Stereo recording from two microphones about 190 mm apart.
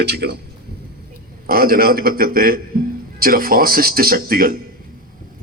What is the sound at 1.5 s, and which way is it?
A man's voice, 50° right (ahead or behind).